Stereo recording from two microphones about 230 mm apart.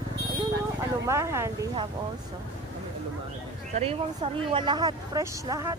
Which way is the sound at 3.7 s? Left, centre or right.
Right.